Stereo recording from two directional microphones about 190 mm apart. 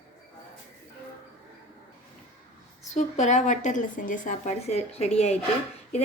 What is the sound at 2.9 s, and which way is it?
A woman's voice, 40° left (ahead or behind).